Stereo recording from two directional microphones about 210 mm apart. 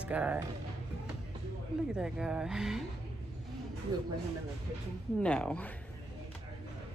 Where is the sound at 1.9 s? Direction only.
5° right (ahead or behind).